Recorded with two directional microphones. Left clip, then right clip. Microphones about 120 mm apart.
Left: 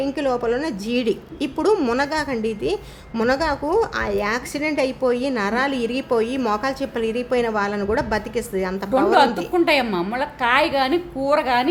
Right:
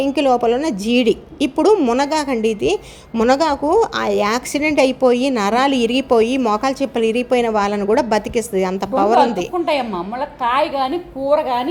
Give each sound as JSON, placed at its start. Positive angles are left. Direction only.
{"t": 0.0, "sound": "a woman's voice", "side_deg": -30}
{"t": 9.1, "sound": "a woman's voice", "side_deg": 90}